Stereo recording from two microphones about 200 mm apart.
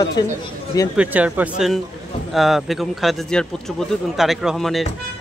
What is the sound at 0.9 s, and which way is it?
A man's voice, 5° right (ahead or behind).